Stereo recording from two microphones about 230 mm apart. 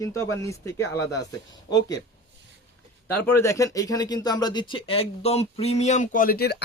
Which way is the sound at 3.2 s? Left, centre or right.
Centre.